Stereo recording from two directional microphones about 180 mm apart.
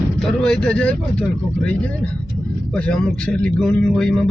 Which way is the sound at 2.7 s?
5° left (ahead or behind).